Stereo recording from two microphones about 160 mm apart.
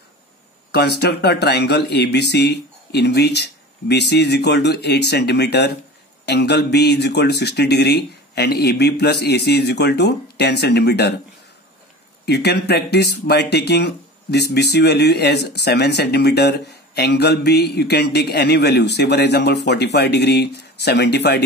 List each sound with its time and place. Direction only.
0.7 s speech: 90° left
12.3 s speech: 90° left